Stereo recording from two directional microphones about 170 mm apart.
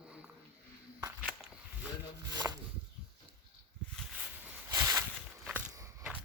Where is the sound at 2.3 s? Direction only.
25° right (ahead or behind).